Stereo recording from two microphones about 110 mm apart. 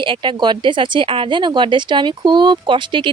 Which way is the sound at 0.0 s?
50° right (ahead or behind).